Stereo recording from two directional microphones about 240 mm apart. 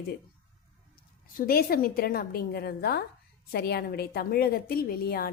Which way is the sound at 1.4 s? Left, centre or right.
Left.